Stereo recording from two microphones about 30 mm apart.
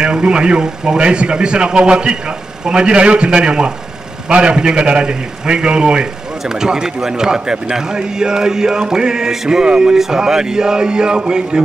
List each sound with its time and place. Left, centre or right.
0.0 s speech: right
6.4 s a man's voice: right